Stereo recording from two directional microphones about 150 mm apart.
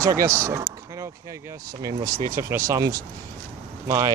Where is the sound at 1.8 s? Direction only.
25° right (ahead or behind).